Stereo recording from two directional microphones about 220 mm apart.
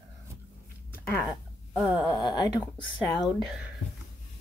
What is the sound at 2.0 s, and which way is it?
Speech, 15° left (ahead or behind).